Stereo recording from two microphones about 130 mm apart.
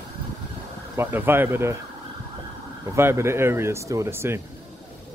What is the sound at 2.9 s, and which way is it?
Speech, 20° right (ahead or behind).